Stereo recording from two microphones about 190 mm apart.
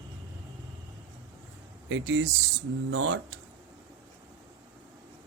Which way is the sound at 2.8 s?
90° right.